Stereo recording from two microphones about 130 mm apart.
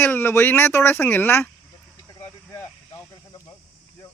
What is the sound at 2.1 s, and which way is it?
Vehicle, 20° left (ahead or behind).